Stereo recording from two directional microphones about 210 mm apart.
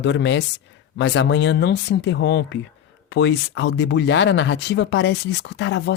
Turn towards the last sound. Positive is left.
turn(degrees=55)  # may be behind; listen again after turning